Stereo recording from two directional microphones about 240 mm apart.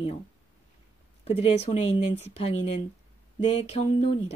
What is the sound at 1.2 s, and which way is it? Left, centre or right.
Speech, left.